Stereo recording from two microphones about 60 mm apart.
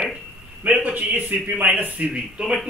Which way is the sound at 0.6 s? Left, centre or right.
Right.